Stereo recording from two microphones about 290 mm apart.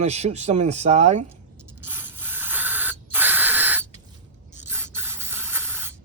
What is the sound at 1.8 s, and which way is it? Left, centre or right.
Spray, centre.